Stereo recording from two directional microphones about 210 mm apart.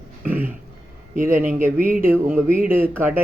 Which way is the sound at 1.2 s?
40° right (ahead or behind).